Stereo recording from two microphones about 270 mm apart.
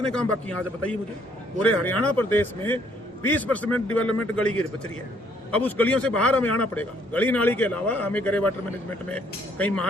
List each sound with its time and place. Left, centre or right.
0.0 s a man's voice: centre